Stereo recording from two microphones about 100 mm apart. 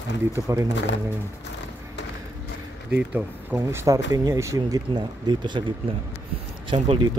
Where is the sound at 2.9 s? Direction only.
15° right (ahead or behind).